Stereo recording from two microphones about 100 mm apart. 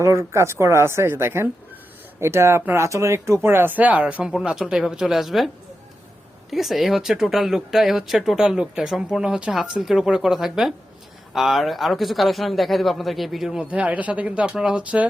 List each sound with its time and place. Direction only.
0.0 s speech: 30° right (ahead or behind); by 5.5 s centre (ahead or behind)
6.5 s speech: centre (ahead or behind)